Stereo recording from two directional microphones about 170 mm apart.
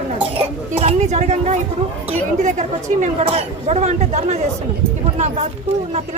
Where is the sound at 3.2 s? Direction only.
35° right (ahead or behind).